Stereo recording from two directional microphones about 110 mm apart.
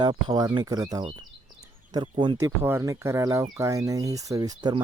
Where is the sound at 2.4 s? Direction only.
25° right (ahead or behind).